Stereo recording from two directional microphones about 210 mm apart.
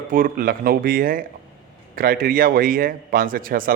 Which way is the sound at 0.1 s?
45° right (ahead or behind).